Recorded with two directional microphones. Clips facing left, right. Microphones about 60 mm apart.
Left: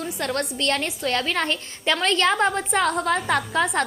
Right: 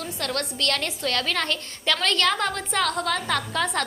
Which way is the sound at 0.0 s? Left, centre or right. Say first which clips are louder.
Left 3 dB; centre.